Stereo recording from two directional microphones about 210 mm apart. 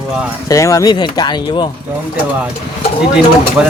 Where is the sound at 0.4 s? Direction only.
15° left (ahead or behind).